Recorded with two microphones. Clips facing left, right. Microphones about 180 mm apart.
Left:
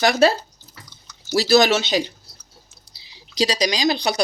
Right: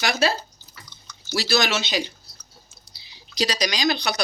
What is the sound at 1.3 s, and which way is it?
Speech, 40° left (ahead or behind).